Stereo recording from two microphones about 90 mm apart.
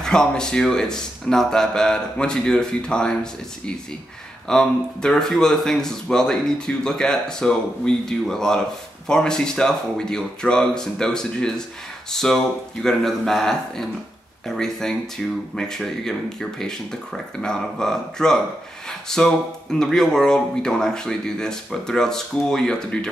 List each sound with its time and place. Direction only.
0.0 s speech: 10° left (ahead or behind)
4.5 s speech: 5° left (ahead or behind)